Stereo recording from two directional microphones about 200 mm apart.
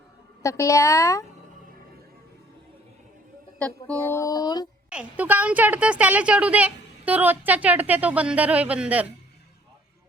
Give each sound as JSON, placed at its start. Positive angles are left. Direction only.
{"t": 0.4, "sound": "speech", "side_deg": 15}
{"t": 3.6, "sound": "speech", "side_deg": 5}
{"t": 4.9, "sound": "a woman's voice", "side_deg": -5}